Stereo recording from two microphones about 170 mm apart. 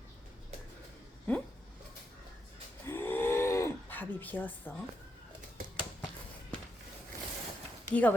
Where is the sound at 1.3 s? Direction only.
10° left (ahead or behind).